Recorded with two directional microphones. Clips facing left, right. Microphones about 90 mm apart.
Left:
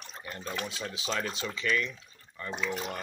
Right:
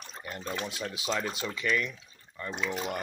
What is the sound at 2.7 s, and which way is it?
Speech, 20° right (ahead or behind).